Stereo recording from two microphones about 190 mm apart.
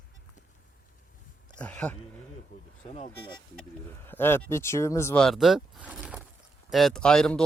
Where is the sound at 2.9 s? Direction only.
35° left (ahead or behind).